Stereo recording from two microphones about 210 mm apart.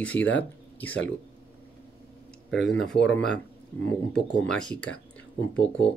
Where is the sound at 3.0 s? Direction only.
60° left (ahead or behind).